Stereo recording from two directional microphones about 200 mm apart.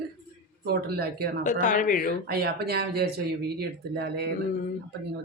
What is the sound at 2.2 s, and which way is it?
Speech, 55° right (ahead or behind).